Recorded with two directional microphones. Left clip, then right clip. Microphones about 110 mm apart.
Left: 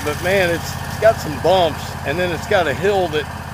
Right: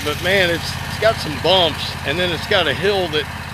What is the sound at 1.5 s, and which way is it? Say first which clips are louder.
Speech: even; 30° right (ahead or behind).